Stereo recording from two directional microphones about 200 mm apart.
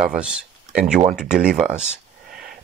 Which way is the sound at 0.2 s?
5° right (ahead or behind).